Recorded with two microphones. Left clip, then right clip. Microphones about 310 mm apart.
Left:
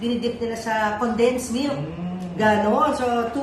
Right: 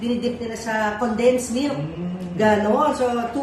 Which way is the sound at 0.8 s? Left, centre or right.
Centre.